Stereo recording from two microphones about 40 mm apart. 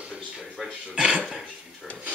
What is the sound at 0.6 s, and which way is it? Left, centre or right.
Speech, centre.